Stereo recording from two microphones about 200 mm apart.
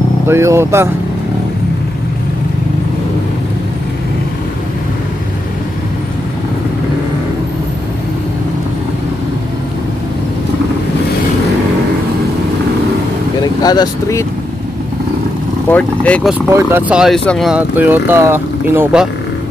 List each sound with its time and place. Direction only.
0.3 s speech: 15° right (ahead or behind)
13.4 s speech: 20° left (ahead or behind)
15.7 s speech: 5° left (ahead or behind)
16.3 s speech: 10° right (ahead or behind)